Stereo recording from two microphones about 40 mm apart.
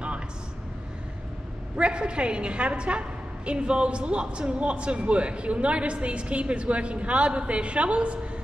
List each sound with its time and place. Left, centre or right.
1.8 s a woman's voice: right